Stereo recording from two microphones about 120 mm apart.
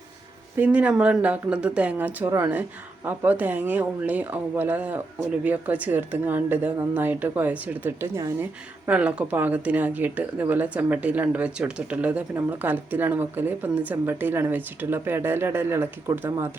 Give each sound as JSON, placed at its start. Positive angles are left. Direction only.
{"t": 0.6, "sound": "speech", "side_deg": -10}
{"t": 8.0, "sound": "speech", "side_deg": -25}
{"t": 8.9, "sound": "speech", "side_deg": -10}